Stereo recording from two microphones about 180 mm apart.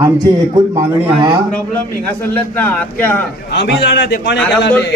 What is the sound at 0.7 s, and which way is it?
Speech, 20° right (ahead or behind).